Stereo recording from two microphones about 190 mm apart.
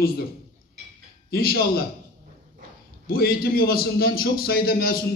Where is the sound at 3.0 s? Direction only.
50° left (ahead or behind).